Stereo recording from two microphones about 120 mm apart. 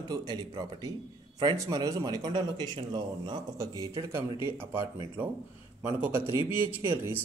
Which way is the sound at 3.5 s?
25° right (ahead or behind).